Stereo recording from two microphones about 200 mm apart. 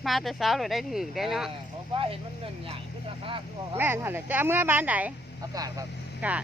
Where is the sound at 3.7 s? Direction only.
10° right (ahead or behind).